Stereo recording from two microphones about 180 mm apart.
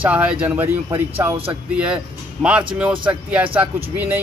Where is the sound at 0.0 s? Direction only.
10° right (ahead or behind).